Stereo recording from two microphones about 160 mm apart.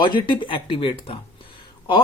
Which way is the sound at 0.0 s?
30° left (ahead or behind).